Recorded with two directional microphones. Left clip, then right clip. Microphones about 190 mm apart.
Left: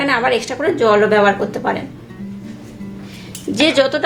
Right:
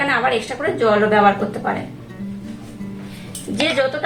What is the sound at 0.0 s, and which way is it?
A woman's voice, 40° left (ahead or behind).